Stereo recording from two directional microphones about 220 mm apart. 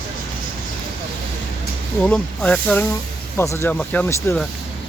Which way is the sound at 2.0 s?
5° left (ahead or behind).